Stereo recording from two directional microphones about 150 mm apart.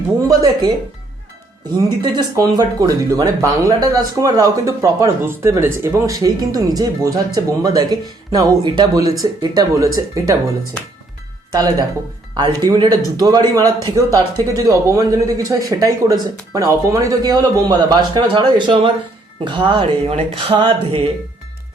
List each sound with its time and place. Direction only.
0.2 s speech: 25° right (ahead or behind)
2.0 s speech: 30° right (ahead or behind)
11.5 s speech: 25° right (ahead or behind); by 21.1 s 40° right (ahead or behind)